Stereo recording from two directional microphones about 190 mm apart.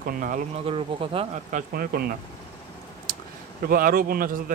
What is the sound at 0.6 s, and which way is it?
Speech, 30° right (ahead or behind).